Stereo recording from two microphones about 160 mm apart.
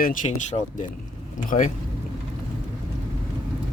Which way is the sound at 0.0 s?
55° left (ahead or behind).